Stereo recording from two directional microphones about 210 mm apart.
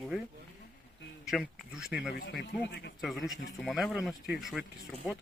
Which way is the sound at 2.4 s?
55° left (ahead or behind).